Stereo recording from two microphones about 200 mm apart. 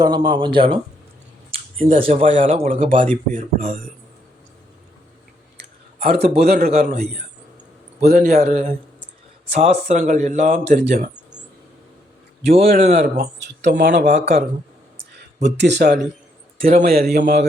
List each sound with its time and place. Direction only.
0.0 s speech: 20° right (ahead or behind)
2.1 s speech: 40° right (ahead or behind)
6.2 s a man's voice: 55° right (ahead or behind)
6.7 s speech: 40° right (ahead or behind)
8.0 s a man's voice: 50° right (ahead or behind)
8.4 s speech: 35° right (ahead or behind)
12.6 s speech: 40° right (ahead or behind)
13.0 s a man's voice: 55° right (ahead or behind)